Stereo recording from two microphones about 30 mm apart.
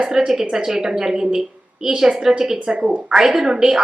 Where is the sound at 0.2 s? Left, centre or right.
Centre.